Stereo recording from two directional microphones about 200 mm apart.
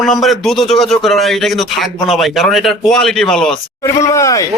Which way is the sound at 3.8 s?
15° left (ahead or behind).